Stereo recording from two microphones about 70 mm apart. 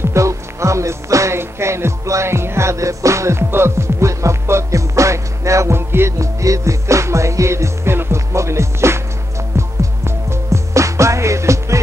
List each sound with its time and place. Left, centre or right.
0.1 s music: right
6.1 s music: right